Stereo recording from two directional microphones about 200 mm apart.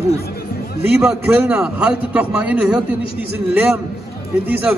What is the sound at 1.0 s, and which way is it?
A man's voice, 10° right (ahead or behind).